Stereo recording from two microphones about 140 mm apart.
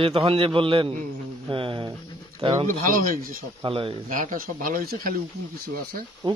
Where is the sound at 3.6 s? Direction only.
40° right (ahead or behind).